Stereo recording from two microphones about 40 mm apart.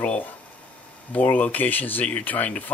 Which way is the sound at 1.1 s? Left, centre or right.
Left.